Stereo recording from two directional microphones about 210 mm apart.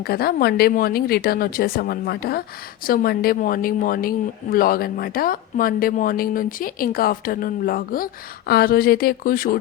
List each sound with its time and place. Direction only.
0.0 s speech: 50° left (ahead or behind)